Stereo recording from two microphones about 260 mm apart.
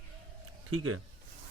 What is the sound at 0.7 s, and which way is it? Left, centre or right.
Speech, right.